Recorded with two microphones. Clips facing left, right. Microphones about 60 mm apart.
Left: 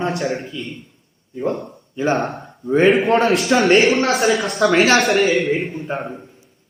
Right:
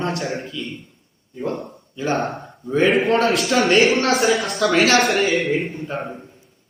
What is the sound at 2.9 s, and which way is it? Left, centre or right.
A man's voice, centre.